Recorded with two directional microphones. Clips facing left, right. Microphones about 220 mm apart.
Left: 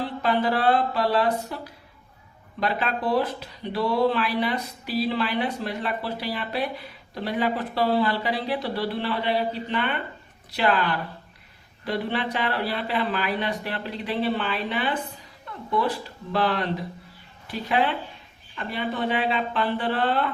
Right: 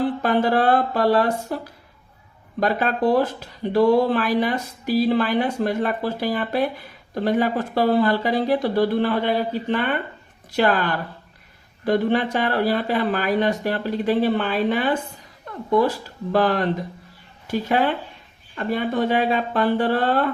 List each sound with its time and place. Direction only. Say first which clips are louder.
0.0 s speech: right 4 dB; 45° right (ahead or behind)
2.6 s speech: right 6 dB; 45° right (ahead or behind)